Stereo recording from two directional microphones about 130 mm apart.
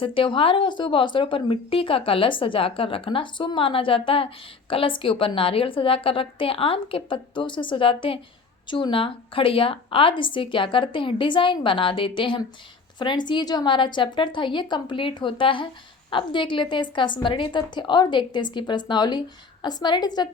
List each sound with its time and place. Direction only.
0.0 s a woman's voice: 40° left (ahead or behind)